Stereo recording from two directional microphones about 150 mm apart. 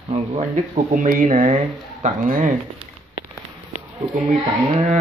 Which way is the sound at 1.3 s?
50° right (ahead or behind).